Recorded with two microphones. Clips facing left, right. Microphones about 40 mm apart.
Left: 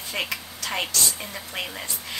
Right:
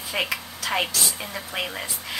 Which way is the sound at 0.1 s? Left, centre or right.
Centre.